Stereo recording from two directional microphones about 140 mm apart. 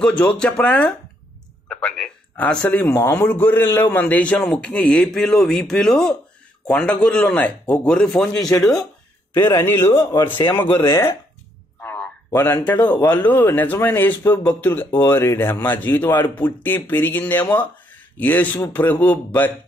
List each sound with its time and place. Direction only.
0.0 s speech: 5° left (ahead or behind)
9.3 s speech: 15° left (ahead or behind)
11.8 s a sound: 15° left (ahead or behind)
12.3 s speech: 20° left (ahead or behind)